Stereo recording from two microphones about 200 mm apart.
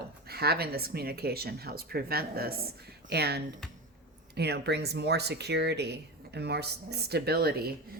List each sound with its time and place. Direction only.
0.3 s speech: 50° right (ahead or behind)